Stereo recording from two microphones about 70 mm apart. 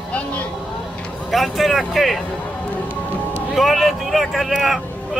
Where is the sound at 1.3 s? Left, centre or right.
Centre.